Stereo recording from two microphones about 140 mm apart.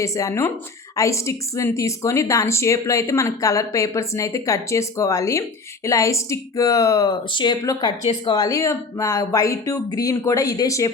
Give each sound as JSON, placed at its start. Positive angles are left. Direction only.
{"t": 0.0, "sound": "speech", "side_deg": 20}